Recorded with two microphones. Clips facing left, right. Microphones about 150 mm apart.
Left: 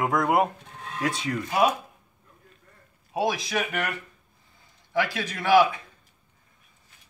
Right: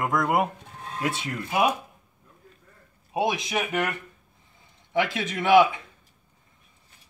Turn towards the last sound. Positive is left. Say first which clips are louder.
# right 1 dB
turn(degrees=-20)  # may be behind; listen again after turning